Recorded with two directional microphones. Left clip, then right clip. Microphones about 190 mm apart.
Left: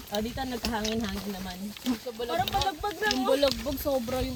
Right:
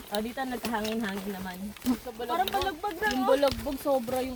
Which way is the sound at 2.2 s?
35° left (ahead or behind).